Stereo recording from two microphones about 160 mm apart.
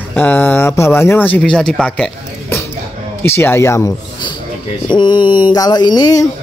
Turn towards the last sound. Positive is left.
turn(degrees=25)  # may be behind; listen again after turning